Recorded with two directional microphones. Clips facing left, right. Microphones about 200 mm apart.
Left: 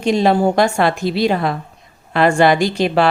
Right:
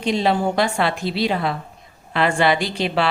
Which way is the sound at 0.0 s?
45° left (ahead or behind).